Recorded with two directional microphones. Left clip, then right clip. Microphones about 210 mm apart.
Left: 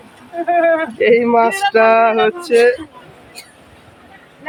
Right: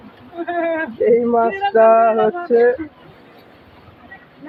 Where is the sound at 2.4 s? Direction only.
25° left (ahead or behind).